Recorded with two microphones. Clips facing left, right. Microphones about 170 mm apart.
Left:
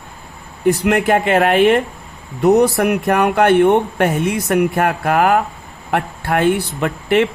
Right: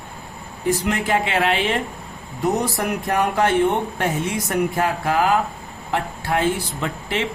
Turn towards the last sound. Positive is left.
turn(degrees=60)  # may be behind; listen again after turning